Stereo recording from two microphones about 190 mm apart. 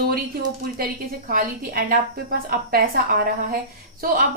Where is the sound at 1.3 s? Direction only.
50° right (ahead or behind).